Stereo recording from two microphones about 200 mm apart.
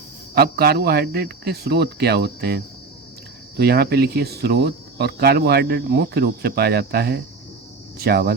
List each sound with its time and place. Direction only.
0.3 s speech: 50° right (ahead or behind)
3.6 s speech: 50° right (ahead or behind)